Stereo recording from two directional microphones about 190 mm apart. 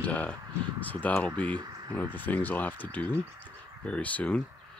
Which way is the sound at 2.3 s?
10° left (ahead or behind).